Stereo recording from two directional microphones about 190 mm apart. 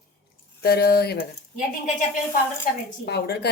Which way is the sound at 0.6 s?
55° left (ahead or behind).